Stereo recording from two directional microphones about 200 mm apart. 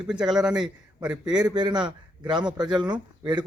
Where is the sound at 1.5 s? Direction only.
20° right (ahead or behind).